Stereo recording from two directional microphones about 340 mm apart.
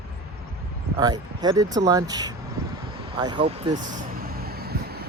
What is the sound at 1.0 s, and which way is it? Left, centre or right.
Speech, centre.